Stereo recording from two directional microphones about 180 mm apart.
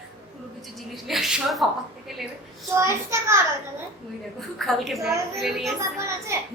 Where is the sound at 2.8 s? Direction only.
15° right (ahead or behind).